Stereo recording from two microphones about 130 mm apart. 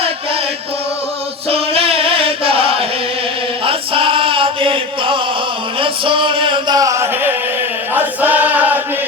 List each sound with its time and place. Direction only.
1.5 s music: 45° right (ahead or behind)
3.7 s chant: 45° right (ahead or behind)
5.8 s a sound: 40° right (ahead or behind); by 7.3 s 20° right (ahead or behind)
7.9 s choir: 15° right (ahead or behind)